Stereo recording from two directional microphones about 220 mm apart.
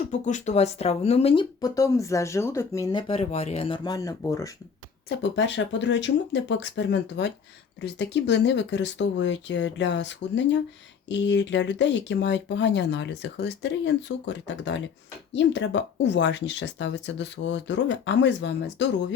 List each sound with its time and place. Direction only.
0.1 s speech: 35° left (ahead or behind); by 3.0 s 15° left (ahead or behind)
3.1 s speech: 30° left (ahead or behind)
5.0 s speech: 55° left (ahead or behind)